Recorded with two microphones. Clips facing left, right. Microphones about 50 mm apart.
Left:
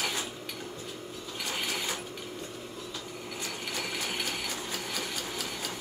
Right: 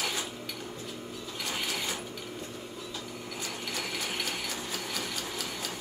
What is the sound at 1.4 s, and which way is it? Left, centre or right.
Mechanisms, centre.